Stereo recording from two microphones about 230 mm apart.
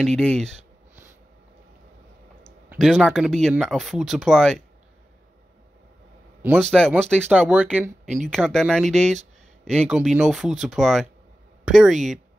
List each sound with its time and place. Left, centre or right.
0.0 s speech: centre
2.7 s speech: centre
6.6 s speech: centre
9.0 s speech: right
9.7 s speech: centre